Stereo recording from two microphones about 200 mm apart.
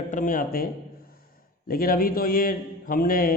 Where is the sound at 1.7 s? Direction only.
45° left (ahead or behind).